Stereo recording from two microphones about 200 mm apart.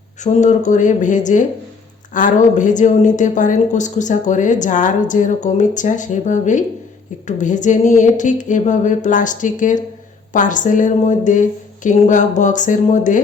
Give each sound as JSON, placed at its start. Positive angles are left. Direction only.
{"t": 0.2, "sound": "a woman's voice", "side_deg": 35}